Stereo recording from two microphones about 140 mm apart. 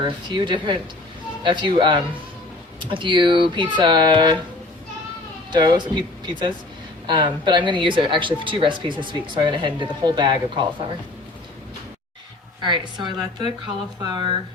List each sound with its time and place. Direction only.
0.0 s speech: 35° right (ahead or behind)
5.5 s speech: 30° right (ahead or behind)
12.6 s speech: 35° right (ahead or behind)